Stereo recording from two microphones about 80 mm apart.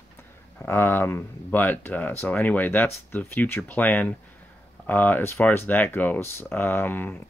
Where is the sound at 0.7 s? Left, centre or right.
Left.